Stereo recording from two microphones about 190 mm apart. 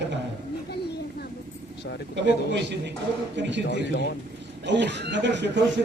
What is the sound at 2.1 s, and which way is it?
Speech, 65° right (ahead or behind).